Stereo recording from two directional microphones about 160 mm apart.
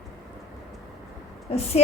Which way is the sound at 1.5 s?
40° left (ahead or behind).